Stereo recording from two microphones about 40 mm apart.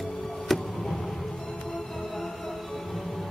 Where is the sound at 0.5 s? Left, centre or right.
Centre.